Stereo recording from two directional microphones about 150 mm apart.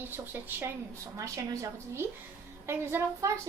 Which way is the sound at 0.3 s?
15° right (ahead or behind).